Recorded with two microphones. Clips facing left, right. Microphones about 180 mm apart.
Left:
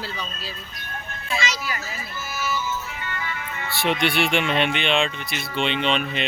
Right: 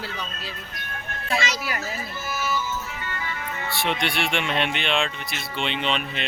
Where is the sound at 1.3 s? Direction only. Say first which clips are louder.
Right 1 dB; 60° right (ahead or behind).